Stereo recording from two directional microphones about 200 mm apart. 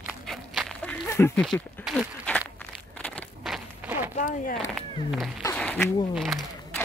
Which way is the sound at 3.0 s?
Centre (ahead or behind).